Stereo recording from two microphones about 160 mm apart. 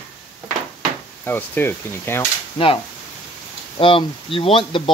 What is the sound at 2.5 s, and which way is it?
Speech, 35° left (ahead or behind).